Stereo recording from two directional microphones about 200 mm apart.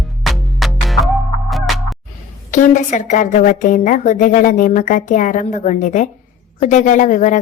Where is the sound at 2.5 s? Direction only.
40° left (ahead or behind).